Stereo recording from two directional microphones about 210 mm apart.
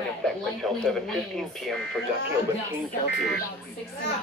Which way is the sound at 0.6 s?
Centre (ahead or behind).